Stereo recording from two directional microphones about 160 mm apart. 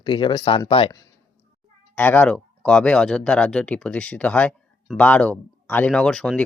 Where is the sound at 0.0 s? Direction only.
30° left (ahead or behind).